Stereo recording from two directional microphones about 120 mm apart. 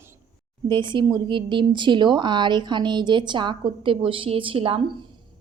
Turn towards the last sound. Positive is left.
turn(degrees=-50)  # may be behind; listen again after turning